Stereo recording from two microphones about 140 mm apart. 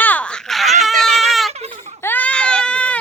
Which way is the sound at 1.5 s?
50° right (ahead or behind).